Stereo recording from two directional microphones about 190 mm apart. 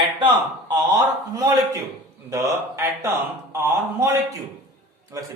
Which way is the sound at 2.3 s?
15° right (ahead or behind).